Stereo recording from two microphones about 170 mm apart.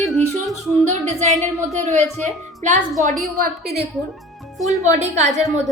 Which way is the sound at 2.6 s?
45° right (ahead or behind).